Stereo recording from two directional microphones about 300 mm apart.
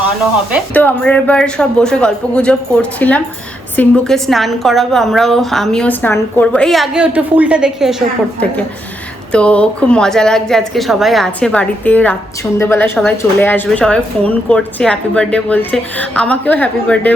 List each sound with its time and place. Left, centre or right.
0.5 s a woman's voice: centre